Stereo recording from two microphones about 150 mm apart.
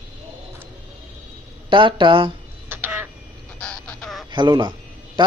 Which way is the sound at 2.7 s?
15° right (ahead or behind).